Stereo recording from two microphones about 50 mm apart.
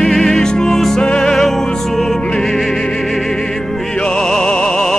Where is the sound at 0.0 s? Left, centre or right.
Centre.